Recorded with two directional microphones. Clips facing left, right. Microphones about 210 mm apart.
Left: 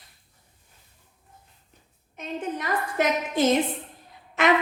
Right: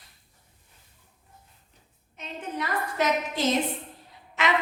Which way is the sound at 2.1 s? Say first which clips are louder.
Left 3 dB; 50° left (ahead or behind).